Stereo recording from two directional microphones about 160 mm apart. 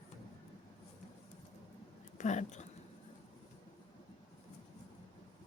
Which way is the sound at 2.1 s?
50° left (ahead or behind).